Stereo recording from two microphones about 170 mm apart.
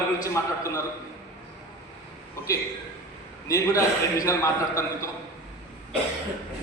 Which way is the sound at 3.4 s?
20° left (ahead or behind).